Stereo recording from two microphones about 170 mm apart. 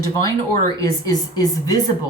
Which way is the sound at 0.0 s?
20° left (ahead or behind).